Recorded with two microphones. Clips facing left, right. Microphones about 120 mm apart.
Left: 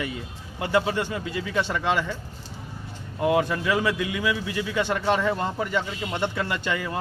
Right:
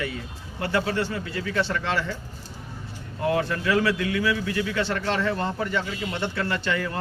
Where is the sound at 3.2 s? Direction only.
15° left (ahead or behind).